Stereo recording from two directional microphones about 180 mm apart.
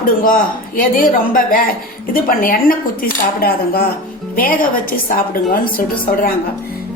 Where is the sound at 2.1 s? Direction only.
55° left (ahead or behind).